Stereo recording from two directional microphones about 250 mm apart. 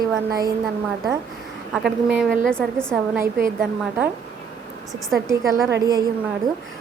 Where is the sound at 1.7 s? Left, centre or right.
Centre.